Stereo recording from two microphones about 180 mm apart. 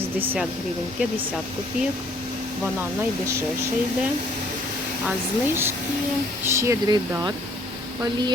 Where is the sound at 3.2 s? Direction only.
15° right (ahead or behind).